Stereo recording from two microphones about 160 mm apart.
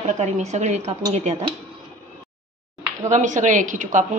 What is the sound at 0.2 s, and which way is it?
Speech, 45° right (ahead or behind).